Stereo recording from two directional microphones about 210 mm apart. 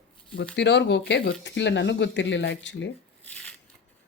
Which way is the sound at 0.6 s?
55° left (ahead or behind).